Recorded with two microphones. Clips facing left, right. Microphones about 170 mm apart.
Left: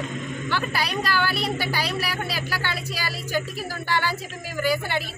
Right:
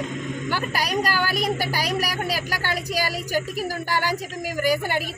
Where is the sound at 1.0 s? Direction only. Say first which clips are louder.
Right 1 dB; 40° right (ahead or behind).